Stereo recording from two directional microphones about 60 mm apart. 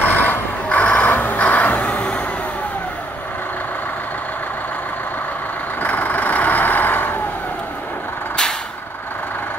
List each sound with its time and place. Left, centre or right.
0.0 s vehicle: left
5.8 s vehicle: left